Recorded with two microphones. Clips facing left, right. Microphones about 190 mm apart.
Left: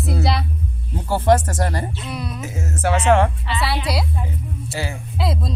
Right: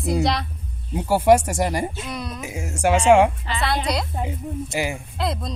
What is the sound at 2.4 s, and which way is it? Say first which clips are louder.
Speech: right 2 dB; 15° right (ahead or behind).